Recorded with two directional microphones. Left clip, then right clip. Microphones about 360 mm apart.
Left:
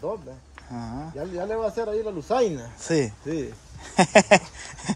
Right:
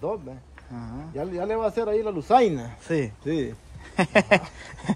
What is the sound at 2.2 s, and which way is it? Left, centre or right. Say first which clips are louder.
Speech: right 5 dB; right.